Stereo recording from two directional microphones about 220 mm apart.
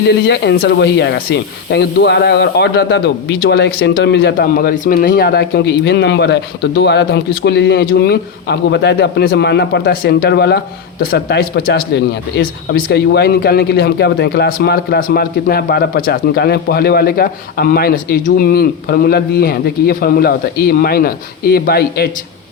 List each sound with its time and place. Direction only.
0.3 s speech: 45° left (ahead or behind)